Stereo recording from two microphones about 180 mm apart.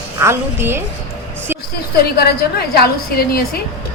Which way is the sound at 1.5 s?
10° right (ahead or behind).